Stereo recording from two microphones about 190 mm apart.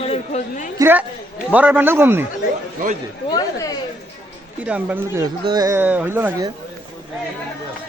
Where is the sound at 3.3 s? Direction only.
20° left (ahead or behind).